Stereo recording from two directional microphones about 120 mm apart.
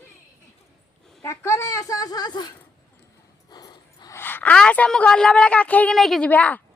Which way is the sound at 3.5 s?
35° left (ahead or behind).